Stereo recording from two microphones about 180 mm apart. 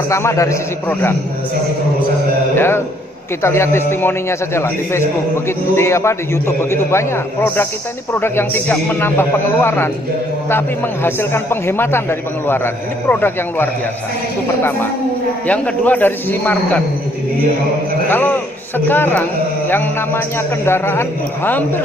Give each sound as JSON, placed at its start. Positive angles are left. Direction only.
{"t": 0.1, "sound": "a man's voice", "side_deg": 15}
{"t": 2.5, "sound": "a man's voice", "side_deg": 15}
{"t": 11.1, "sound": "a man's voice", "side_deg": 15}
{"t": 15.4, "sound": "a man's voice", "side_deg": 10}
{"t": 18.1, "sound": "a man's voice", "side_deg": 10}
{"t": 20.6, "sound": "a man's voice", "side_deg": 15}